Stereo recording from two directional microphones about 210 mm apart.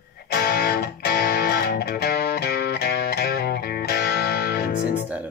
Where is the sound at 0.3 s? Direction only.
45° left (ahead or behind).